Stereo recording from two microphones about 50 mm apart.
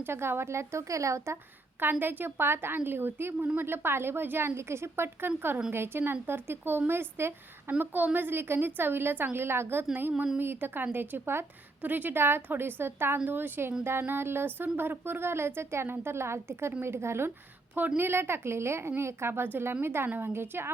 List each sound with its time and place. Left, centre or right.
0.0 s speech: right
1.8 s a woman's voice: right
3.4 s speech: right
3.7 s a woman's voice: right
7.7 s a woman's voice: right
9.9 s speech: right
10.3 s a woman's voice: right
11.8 s a woman's voice: right
17.7 s a woman's voice: right